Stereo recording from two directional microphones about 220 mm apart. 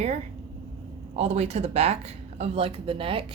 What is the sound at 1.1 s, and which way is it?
Speech, 30° right (ahead or behind).